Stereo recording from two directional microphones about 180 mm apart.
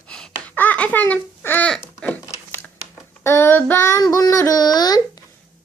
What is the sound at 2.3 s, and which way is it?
Crumpling, 10° left (ahead or behind).